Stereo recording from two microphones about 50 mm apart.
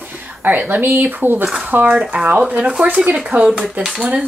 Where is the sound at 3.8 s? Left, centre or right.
Centre.